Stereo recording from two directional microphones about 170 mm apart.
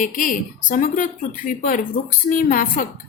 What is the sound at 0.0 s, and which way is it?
A woman's voice, 50° left (ahead or behind).